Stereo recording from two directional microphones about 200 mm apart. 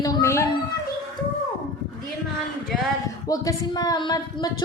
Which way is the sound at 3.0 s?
15° left (ahead or behind).